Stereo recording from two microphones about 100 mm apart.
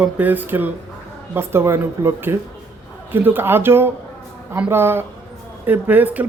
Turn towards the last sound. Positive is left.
turn(degrees=-15)  # may be behind; listen again after turning